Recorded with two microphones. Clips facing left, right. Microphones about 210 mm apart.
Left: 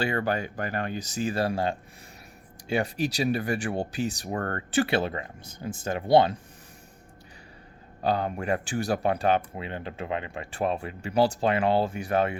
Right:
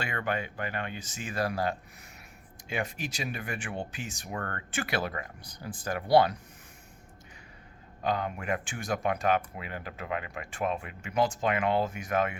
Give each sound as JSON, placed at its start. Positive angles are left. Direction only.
{"t": 0.0, "sound": "speech", "side_deg": 35}
{"t": 8.0, "sound": "speech", "side_deg": 35}